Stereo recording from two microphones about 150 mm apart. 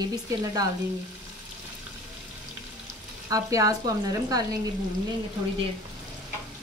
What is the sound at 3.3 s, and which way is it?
Frying, 20° right (ahead or behind).